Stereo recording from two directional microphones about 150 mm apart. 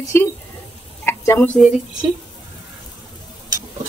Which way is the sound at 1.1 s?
15° left (ahead or behind).